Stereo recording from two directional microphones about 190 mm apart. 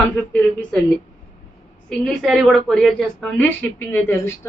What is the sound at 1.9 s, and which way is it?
A woman's voice, centre (ahead or behind).